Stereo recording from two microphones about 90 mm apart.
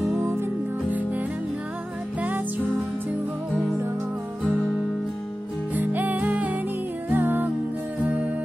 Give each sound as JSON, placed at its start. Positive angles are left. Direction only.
{"t": 0.2, "sound": "music", "side_deg": -20}
{"t": 5.8, "sound": "music", "side_deg": -20}